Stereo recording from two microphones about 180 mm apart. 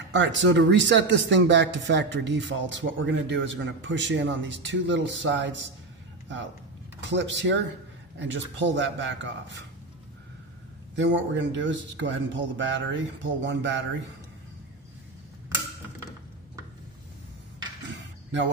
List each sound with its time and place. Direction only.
0.1 s speech: 90° right
7.0 s speech: 85° right
11.0 s speech: 90° right
17.8 s a sound: 90° right